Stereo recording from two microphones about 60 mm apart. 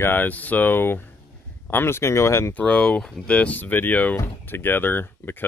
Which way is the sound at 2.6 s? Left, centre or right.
Centre.